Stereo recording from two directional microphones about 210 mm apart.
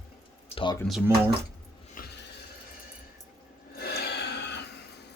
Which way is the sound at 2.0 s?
40° left (ahead or behind).